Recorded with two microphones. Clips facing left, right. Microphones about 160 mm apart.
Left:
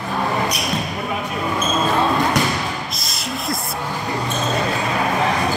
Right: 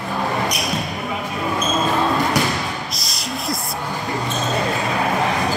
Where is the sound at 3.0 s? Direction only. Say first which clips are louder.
Even; centre (ahead or behind).